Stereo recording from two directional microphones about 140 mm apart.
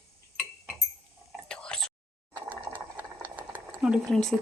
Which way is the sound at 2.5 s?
10° right (ahead or behind).